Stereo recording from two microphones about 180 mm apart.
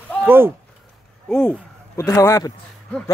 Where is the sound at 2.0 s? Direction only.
15° left (ahead or behind).